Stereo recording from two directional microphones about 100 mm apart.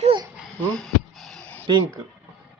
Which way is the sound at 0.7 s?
5° left (ahead or behind).